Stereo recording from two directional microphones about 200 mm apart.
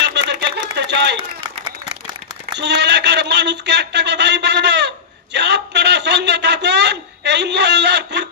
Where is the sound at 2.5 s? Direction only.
60° right (ahead or behind).